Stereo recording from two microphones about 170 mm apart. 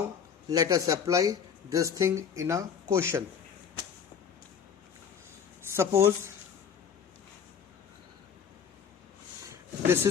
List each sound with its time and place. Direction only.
0.4 s speech: 20° right (ahead or behind)
5.7 s speech: 15° right (ahead or behind)
9.5 s a sound: 15° right (ahead or behind)